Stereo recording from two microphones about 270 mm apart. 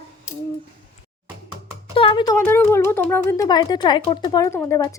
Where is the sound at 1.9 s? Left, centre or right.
Centre.